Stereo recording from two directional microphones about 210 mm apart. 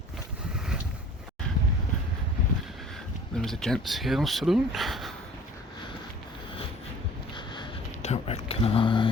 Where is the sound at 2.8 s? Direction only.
Centre (ahead or behind).